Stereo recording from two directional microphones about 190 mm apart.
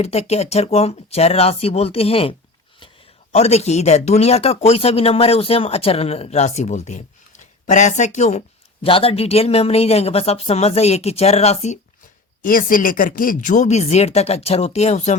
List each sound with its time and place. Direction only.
0.0 s speech: 35° left (ahead or behind)
3.3 s speech: 35° left (ahead or behind)
12.4 s speech: 45° left (ahead or behind)